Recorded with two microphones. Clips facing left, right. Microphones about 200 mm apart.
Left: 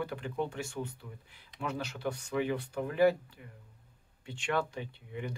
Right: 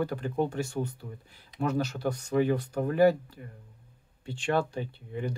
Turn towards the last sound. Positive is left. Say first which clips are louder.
# right 5 dB
turn(degrees=-35)  # may be behind; listen again after turning